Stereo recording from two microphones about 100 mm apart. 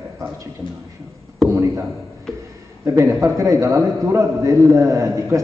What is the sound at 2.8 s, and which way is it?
A man's voice, 30° right (ahead or behind).